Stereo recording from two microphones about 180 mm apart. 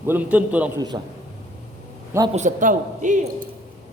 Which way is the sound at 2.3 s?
40° right (ahead or behind).